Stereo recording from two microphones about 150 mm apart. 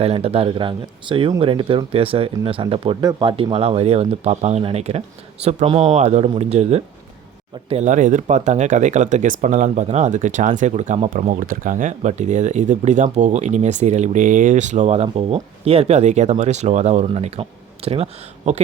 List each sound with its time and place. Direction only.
0.0 s speech: 40° right (ahead or behind)